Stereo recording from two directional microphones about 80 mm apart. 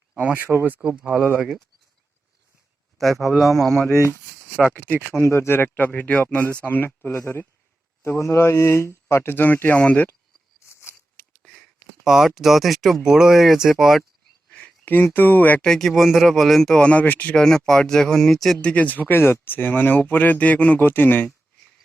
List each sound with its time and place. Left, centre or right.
0.2 s speech: centre
3.0 s speech: centre
4.9 s speech: right
5.1 s speech: left
12.0 s speech: centre
14.5 s speech: centre
15.6 s speech: centre
17.4 s speech: centre
18.7 s speech: centre